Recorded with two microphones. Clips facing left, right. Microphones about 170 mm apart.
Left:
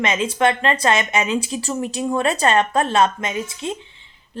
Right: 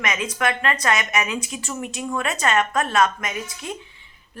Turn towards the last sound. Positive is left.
turn(degrees=25)  # may be behind; listen again after turning